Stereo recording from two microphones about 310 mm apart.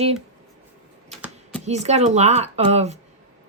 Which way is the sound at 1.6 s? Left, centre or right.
Right.